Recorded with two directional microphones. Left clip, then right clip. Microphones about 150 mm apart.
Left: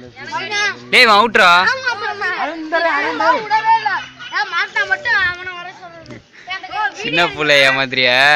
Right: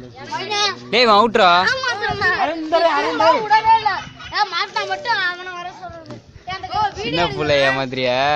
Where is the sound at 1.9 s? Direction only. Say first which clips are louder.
Right 1 dB; 20° right (ahead or behind).